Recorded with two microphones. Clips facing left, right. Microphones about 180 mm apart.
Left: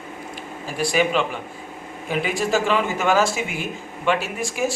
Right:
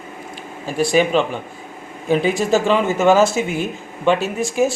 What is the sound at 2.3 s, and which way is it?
Speech, 25° right (ahead or behind).